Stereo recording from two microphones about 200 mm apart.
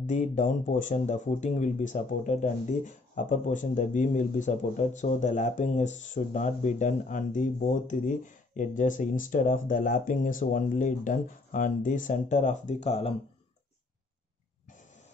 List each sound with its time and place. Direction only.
0.0 s speech: 40° left (ahead or behind)